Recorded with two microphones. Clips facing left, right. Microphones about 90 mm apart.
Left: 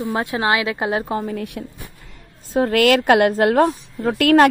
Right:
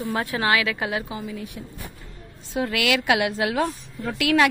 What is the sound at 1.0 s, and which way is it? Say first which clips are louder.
Speech: left 8 dB; 50° left (ahead or behind).